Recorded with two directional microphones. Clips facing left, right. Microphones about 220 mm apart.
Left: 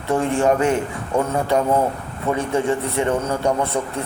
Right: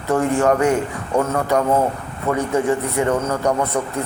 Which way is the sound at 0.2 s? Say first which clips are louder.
Right 1 dB; 25° left (ahead or behind).